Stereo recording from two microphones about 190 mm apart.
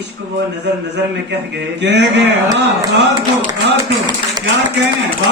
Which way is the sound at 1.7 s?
65° right (ahead or behind).